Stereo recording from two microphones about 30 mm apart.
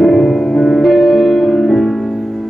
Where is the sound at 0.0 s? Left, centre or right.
Centre.